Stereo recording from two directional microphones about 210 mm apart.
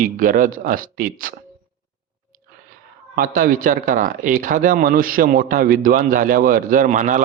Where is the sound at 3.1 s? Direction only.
40° right (ahead or behind).